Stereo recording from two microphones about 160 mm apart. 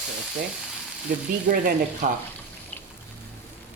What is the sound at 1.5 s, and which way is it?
Speech, 60° right (ahead or behind).